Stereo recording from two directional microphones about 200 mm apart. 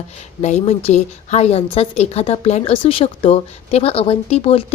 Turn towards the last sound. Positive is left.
turn(degrees=30)  # may be behind; listen again after turning